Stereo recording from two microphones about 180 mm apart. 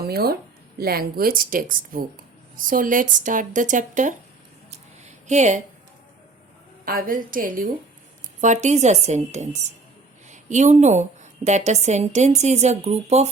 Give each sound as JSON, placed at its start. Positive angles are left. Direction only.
{"t": 0.0, "sound": "speech", "side_deg": -60}
{"t": 4.7, "sound": "a sound", "side_deg": -40}
{"t": 6.8, "sound": "a woman's voice", "side_deg": -50}